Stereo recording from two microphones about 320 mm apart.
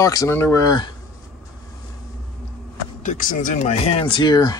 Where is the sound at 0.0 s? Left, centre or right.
Centre.